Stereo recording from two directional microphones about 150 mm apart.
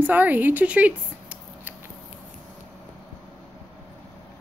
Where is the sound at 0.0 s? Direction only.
10° right (ahead or behind).